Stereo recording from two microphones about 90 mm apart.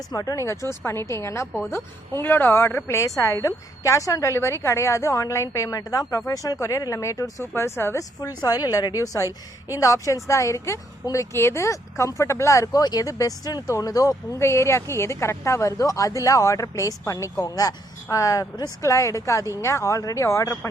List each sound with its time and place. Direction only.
0.1 s a woman's voice: 45° left (ahead or behind); by 8.0 s 30° left (ahead or behind)
8.2 s a woman's voice: 45° left (ahead or behind)
12.8 s a woman's voice: 45° left (ahead or behind)
14.3 s a woman's voice: 30° left (ahead or behind)